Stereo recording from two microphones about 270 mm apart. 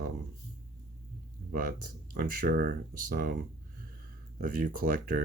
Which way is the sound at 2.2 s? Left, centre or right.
Right.